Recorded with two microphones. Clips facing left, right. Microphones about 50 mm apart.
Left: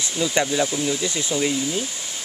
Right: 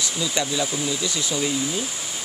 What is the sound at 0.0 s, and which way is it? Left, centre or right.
Speech, left.